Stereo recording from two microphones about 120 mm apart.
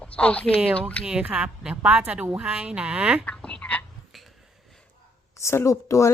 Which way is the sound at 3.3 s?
10° left (ahead or behind).